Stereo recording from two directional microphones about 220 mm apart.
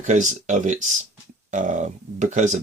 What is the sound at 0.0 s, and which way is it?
Speech, 35° right (ahead or behind).